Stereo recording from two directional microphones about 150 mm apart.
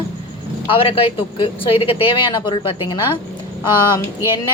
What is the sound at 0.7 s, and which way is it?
A woman's voice, 35° left (ahead or behind).